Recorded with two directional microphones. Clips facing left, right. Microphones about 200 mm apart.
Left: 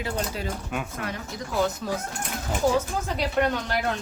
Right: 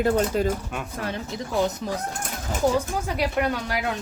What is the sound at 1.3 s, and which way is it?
Speech, 25° right (ahead or behind).